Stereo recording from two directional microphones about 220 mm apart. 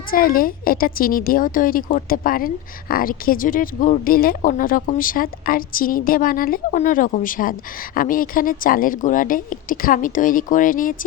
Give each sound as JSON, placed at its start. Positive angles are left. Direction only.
{"t": 0.1, "sound": "speech", "side_deg": 40}